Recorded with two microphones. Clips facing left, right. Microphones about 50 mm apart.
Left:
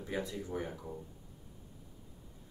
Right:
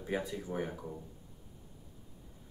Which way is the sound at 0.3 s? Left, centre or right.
Centre.